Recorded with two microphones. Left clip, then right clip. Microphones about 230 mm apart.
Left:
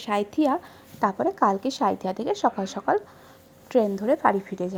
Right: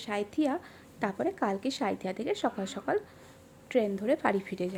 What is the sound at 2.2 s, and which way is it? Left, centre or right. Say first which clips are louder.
Speech: left 8 dB; centre.